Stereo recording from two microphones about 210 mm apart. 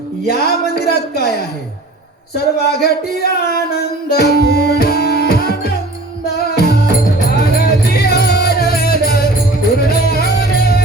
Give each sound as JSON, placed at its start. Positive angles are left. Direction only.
{"t": 0.3, "sound": "speech", "side_deg": 50}
{"t": 2.3, "sound": "a sound", "side_deg": 50}
{"t": 6.2, "sound": "music", "side_deg": 50}